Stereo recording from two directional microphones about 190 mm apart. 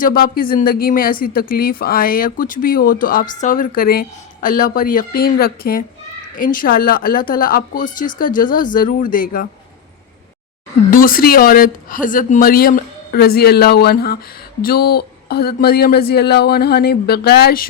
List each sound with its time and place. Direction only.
0.0 s speech: 50° left (ahead or behind)
10.9 s speech: 50° left (ahead or behind)